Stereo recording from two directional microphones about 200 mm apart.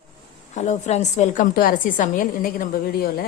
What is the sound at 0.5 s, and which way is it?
A woman's voice, 35° left (ahead or behind).